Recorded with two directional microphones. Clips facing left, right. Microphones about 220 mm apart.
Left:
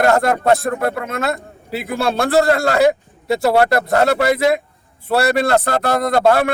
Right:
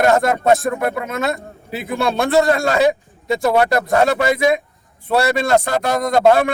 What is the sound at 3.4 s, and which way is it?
Speech, 30° left (ahead or behind).